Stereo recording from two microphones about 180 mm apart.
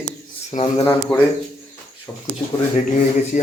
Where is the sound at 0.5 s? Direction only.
40° left (ahead or behind).